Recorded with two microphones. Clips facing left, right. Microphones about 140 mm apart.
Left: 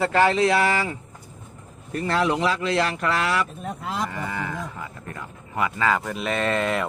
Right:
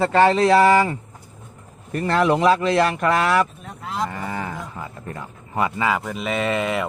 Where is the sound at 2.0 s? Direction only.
50° right (ahead or behind).